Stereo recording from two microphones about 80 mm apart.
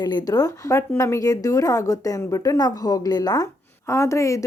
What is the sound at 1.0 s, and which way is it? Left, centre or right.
A woman's voice, left.